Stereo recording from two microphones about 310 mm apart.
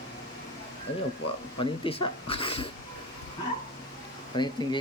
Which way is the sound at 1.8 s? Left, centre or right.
Centre.